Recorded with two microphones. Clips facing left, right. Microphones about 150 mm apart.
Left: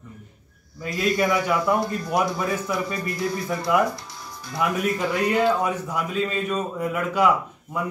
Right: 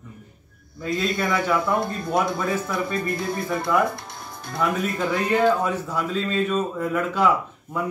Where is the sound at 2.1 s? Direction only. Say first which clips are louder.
Right 1 dB; 25° right (ahead or behind).